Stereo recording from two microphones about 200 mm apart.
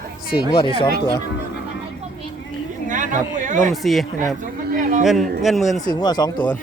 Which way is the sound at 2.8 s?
40° right (ahead or behind).